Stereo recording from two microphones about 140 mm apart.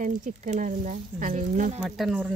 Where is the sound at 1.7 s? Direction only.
Centre (ahead or behind).